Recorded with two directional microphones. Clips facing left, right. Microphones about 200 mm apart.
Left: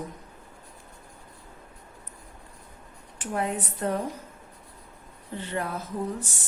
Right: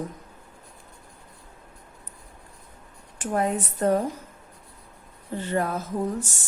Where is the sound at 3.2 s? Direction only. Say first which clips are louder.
Right 4 dB; 40° right (ahead or behind).